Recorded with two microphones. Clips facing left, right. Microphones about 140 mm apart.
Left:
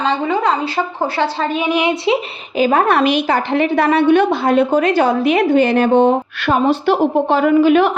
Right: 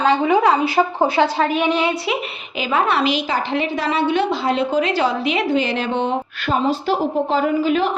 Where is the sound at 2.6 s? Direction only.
45° left (ahead or behind).